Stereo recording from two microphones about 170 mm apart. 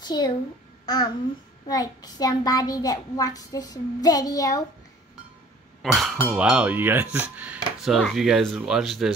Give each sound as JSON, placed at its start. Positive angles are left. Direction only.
{"t": 0.0, "sound": "a child's voice", "side_deg": 25}
{"t": 5.8, "sound": "speech", "side_deg": 0}